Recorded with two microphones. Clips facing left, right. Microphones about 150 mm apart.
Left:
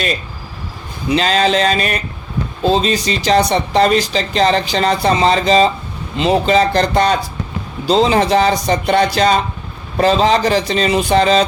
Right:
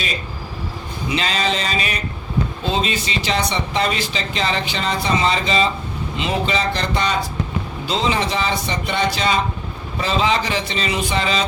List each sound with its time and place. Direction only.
1.1 s speech: 40° left (ahead or behind)
1.6 s speech: 55° left (ahead or behind)
2.6 s speech: 35° left (ahead or behind)